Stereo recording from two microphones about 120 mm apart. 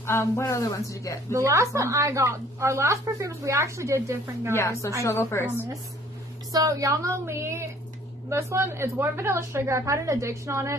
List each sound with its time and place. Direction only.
0.0 s speech: 20° left (ahead or behind)
1.3 s a woman's voice: 25° right (ahead or behind)
4.6 s speech: 25° left (ahead or behind)
6.5 s a woman's voice: 30° right (ahead or behind)